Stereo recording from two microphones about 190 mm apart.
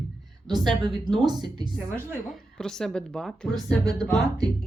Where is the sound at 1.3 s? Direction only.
25° right (ahead or behind).